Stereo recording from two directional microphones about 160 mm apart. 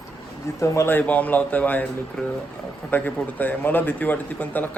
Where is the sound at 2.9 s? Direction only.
10° left (ahead or behind).